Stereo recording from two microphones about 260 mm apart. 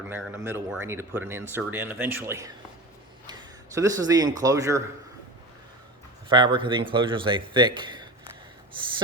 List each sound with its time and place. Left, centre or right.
0.1 s speech: centre
3.8 s speech: centre
6.2 s a man's voice: centre